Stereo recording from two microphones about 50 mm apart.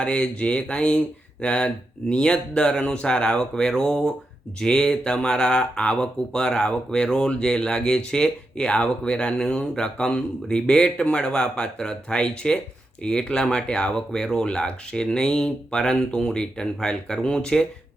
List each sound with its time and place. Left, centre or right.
0.0 s speech: left